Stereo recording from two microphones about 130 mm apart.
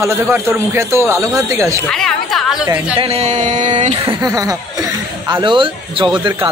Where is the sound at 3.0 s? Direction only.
50° right (ahead or behind).